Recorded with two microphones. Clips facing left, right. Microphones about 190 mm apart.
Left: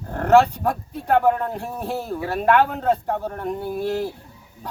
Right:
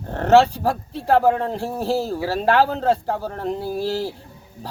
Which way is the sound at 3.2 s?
30° right (ahead or behind).